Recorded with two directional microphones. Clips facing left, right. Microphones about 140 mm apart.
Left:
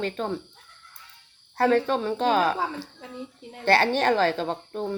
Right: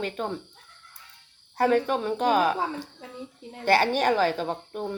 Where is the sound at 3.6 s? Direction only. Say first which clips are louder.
Left 1 dB; 10° right (ahead or behind).